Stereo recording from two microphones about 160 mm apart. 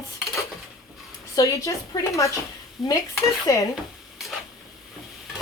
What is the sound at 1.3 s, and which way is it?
Speech, 20° left (ahead or behind).